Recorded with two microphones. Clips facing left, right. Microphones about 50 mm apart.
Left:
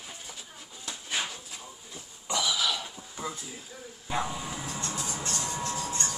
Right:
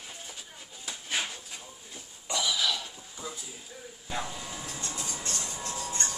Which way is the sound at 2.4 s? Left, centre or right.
Centre.